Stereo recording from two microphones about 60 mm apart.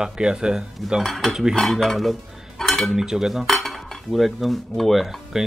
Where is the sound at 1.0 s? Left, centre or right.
Centre.